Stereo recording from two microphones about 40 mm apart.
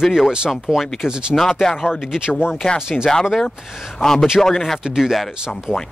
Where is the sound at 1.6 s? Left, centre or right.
Centre.